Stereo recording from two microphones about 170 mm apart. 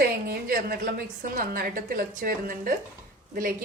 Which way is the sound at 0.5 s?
60° right (ahead or behind).